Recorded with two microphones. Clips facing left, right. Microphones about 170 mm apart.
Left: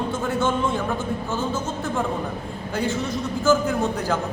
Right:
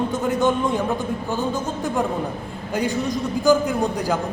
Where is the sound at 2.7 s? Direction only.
15° right (ahead or behind).